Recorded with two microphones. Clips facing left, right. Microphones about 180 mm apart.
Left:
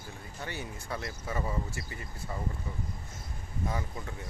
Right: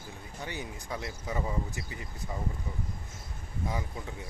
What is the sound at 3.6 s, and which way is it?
Speech, 10° right (ahead or behind).